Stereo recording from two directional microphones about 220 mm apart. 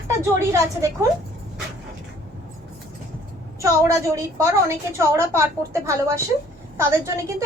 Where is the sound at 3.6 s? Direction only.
15° right (ahead or behind).